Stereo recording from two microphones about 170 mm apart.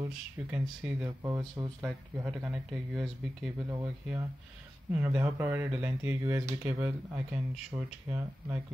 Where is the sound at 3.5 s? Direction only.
20° right (ahead or behind).